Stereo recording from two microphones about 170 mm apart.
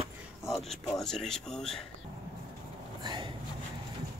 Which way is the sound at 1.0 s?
5° left (ahead or behind).